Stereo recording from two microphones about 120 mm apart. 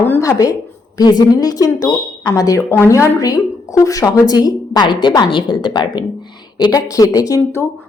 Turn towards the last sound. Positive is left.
turn(degrees=25)  # may be behind; listen again after turning